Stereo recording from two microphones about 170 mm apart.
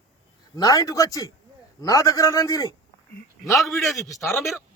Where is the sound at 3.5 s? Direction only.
Centre (ahead or behind).